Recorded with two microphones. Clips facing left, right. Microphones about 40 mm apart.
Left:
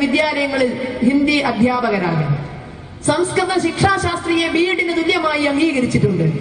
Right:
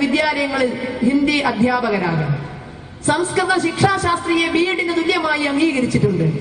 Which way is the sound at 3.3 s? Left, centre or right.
Left.